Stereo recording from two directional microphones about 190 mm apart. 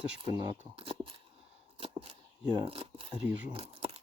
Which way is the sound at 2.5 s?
25° right (ahead or behind).